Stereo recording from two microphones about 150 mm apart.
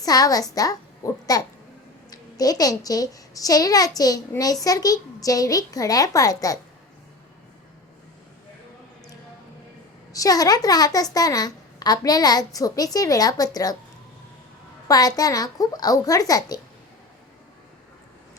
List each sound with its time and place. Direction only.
0.0 s a child's voice: 25° left (ahead or behind)
10.1 s a child's voice: 25° left (ahead or behind)
14.8 s a child's voice: 25° left (ahead or behind)